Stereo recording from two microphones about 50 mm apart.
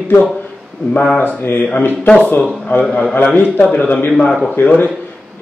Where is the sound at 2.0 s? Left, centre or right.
Left.